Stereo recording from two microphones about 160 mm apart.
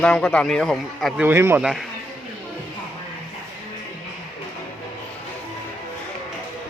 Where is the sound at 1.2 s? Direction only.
15° right (ahead or behind).